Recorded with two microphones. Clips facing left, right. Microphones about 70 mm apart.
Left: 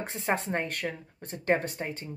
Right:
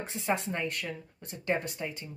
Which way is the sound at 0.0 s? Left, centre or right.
Left.